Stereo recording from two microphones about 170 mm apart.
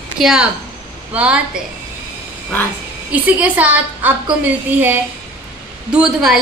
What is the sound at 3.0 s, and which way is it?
A woman's voice, 10° right (ahead or behind).